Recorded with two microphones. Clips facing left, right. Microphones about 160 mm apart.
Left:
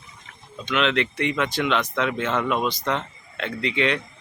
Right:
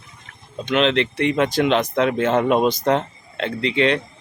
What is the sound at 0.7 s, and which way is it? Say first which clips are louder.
Speech: right 4 dB; 35° right (ahead or behind).